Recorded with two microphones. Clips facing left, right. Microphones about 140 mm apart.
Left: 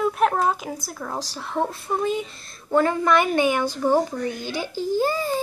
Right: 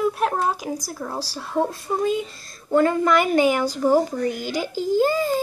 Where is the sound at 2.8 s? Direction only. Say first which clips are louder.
Right 2 dB; 40° right (ahead or behind).